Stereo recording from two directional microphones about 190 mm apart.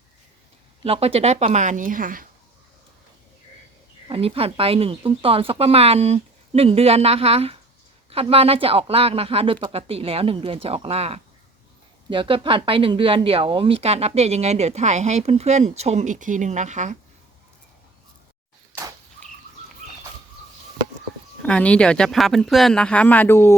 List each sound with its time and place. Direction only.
0.9 s speech: 30° right (ahead or behind); by 2.2 s 45° right (ahead or behind)
4.1 s speech: 30° right (ahead or behind)
18.7 s a sound: 15° right (ahead or behind)
21.4 s speech: 5° left (ahead or behind)